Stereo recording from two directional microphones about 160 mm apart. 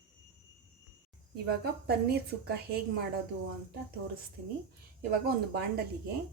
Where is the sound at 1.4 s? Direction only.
85° right.